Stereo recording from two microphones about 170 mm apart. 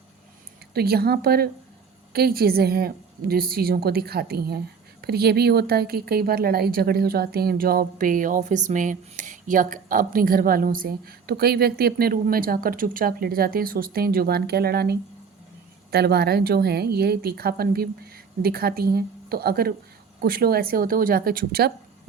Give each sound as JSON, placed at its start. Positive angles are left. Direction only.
{"t": 0.7, "sound": "a woman's voice", "side_deg": -65}